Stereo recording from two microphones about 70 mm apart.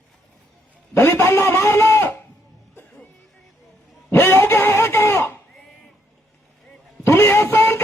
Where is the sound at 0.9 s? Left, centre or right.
Left.